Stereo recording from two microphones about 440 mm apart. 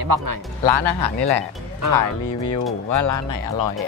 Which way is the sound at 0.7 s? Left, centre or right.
Left.